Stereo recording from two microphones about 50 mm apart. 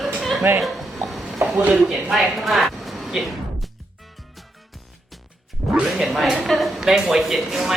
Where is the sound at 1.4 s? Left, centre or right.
Right.